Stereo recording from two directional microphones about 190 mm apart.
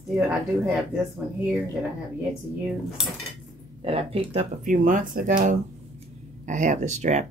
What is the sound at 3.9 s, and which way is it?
Speech, 30° right (ahead or behind).